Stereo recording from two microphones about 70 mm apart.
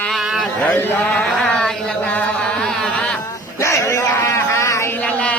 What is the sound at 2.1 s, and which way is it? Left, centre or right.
Chant, left.